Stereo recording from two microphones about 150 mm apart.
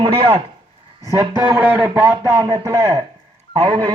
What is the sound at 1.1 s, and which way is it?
A man's voice, 20° right (ahead or behind).